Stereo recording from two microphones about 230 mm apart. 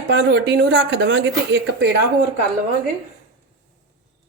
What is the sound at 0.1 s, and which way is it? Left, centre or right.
Speech, right.